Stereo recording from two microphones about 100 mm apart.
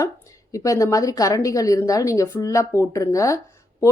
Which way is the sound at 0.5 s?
35° left (ahead or behind).